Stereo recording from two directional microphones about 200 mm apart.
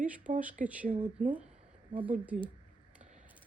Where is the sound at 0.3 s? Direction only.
40° right (ahead or behind).